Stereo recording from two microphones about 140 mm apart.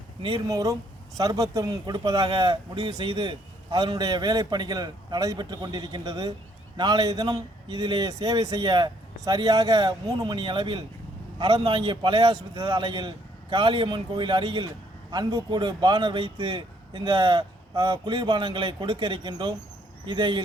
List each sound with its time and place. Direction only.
0.2 s a man's voice: 35° right (ahead or behind)